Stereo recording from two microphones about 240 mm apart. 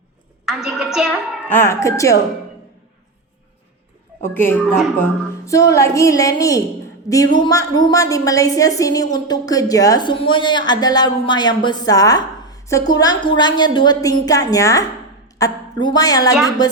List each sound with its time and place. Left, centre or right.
0.4 s a woman's voice: centre
1.5 s a woman's voice: centre
4.2 s a woman's voice: centre